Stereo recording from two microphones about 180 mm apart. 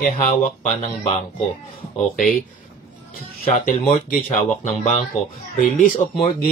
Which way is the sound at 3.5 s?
45° left (ahead or behind).